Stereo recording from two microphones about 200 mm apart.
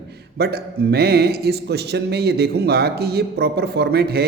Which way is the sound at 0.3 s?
55° right (ahead or behind).